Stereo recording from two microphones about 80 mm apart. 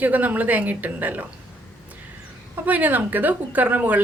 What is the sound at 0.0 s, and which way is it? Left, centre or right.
A woman's voice, right.